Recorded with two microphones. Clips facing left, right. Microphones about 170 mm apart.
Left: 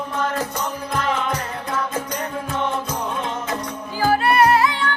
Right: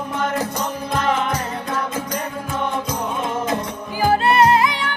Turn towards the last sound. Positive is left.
turn(degrees=-15)  # may be behind; listen again after turning